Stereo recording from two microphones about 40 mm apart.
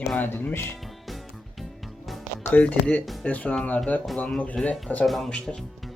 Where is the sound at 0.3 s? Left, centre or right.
Left.